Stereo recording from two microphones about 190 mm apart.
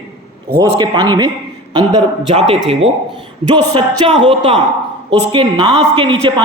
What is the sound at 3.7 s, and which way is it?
A man's voice, 25° right (ahead or behind).